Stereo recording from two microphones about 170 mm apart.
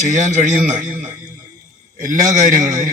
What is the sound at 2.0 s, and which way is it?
Speech, 50° right (ahead or behind).